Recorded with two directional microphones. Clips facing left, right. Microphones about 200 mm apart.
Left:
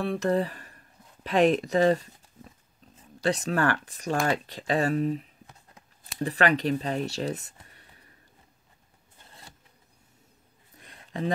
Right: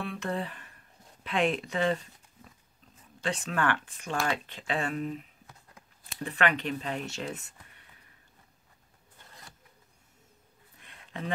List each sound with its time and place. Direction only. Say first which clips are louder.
0.0 s speech: left 8 dB; 40° left (ahead or behind)
3.0 s speech: left 6 dB; 40° left (ahead or behind)
7.6 s whispering: left 3 dB; 35° left (ahead or behind)
10.8 s a sound: left 7 dB; 35° left (ahead or behind)